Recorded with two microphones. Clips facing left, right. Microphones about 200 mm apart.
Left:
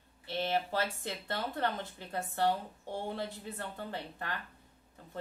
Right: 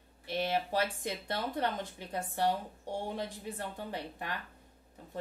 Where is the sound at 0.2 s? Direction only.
15° right (ahead or behind).